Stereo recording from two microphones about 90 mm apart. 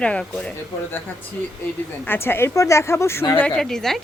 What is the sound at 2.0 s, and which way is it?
Speech, 25° left (ahead or behind).